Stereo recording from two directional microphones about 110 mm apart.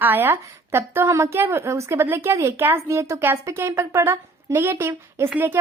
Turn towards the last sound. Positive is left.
turn(degrees=-20)  # may be behind; listen again after turning